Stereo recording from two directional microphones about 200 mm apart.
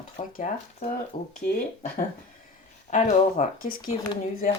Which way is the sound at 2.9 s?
35° left (ahead or behind).